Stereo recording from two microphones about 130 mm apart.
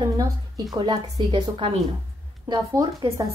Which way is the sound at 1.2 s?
50° right (ahead or behind).